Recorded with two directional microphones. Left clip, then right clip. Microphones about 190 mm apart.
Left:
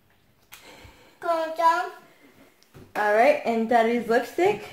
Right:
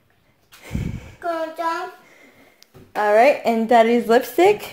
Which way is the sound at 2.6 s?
30° right (ahead or behind).